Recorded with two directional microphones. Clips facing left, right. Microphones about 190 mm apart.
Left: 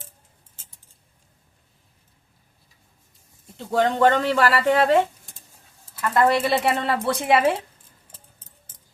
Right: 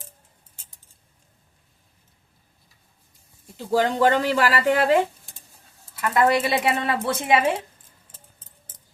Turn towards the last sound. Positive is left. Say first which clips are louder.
# left 1 dB
turn(degrees=0)  # may be behind; listen again after turning